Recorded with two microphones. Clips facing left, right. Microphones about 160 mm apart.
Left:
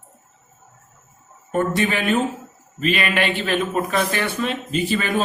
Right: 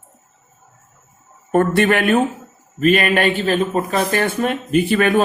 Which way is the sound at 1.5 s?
60° right (ahead or behind).